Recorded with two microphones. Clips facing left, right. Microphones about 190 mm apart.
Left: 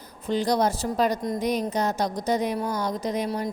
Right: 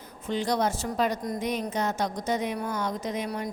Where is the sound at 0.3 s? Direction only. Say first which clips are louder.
Left 4 dB; 35° left (ahead or behind).